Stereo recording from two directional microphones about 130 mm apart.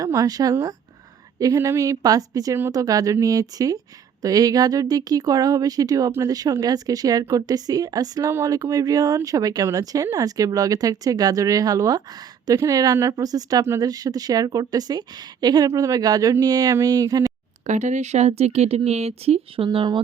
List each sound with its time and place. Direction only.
0.0 s speech: 30° right (ahead or behind)
17.7 s speech: 65° right (ahead or behind)
19.6 s speech: 35° right (ahead or behind)